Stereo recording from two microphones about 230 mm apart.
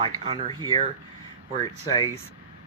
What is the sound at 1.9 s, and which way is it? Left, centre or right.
Speech, centre.